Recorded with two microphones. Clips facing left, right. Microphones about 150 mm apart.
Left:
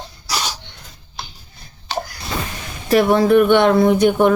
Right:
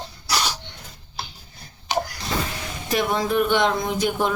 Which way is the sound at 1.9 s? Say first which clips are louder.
Right 1 dB; 20° right (ahead or behind).